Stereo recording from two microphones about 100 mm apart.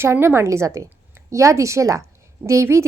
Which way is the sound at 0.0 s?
25° right (ahead or behind).